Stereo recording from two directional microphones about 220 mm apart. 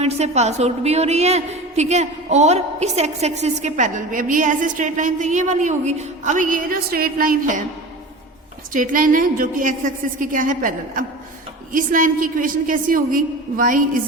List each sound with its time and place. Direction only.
0.0 s a woman's voice: 30° right (ahead or behind)
8.7 s a woman's voice: 35° right (ahead or behind)